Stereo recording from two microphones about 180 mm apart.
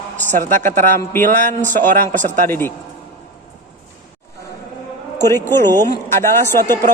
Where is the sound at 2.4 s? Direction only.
10° left (ahead or behind).